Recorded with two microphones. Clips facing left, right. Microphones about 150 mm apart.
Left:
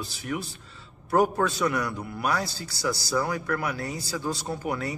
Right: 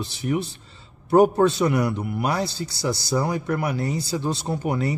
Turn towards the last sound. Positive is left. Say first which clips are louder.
# right 5 dB
turn(degrees=-25)  # may be behind; listen again after turning